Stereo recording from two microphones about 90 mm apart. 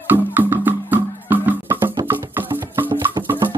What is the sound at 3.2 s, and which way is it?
Music, 50° right (ahead or behind).